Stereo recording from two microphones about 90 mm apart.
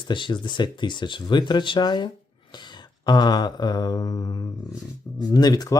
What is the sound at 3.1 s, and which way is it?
Mantra, 50° left (ahead or behind).